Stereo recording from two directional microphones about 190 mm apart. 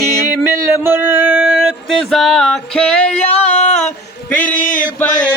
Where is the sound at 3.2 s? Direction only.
35° left (ahead or behind).